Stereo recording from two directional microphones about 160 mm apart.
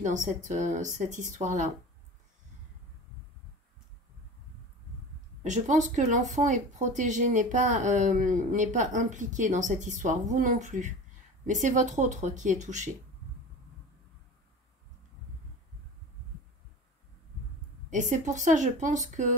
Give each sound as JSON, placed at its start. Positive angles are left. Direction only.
{"t": 0.0, "sound": "speech", "side_deg": -50}
{"t": 5.4, "sound": "speech", "side_deg": -50}
{"t": 17.8, "sound": "speech", "side_deg": -50}